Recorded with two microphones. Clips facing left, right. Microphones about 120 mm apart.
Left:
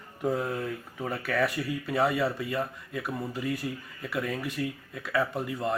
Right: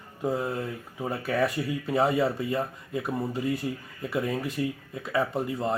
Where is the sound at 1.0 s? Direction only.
20° right (ahead or behind).